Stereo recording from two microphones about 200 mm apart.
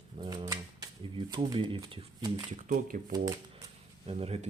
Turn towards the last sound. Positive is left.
turn(degrees=-30)  # may be behind; listen again after turning